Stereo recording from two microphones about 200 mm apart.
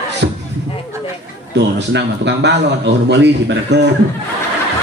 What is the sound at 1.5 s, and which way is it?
A man's voice, 60° right (ahead or behind).